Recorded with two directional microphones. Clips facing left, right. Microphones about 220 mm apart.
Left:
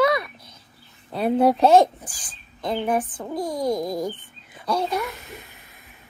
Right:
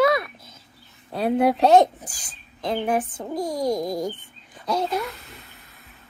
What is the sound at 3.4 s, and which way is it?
Speech, 25° right (ahead or behind).